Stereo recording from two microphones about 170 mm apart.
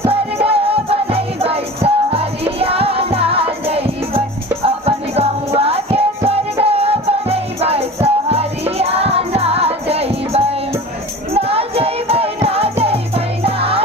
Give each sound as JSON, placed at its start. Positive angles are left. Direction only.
{"t": 0.1, "sound": "music", "side_deg": -35}